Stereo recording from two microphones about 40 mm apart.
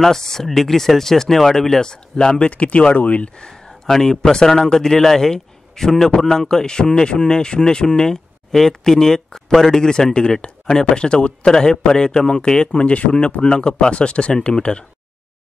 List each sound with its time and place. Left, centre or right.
0.0 s speech: centre
2.5 s speech: left
3.3 s a man's voice: left
6.1 s a man's voice: left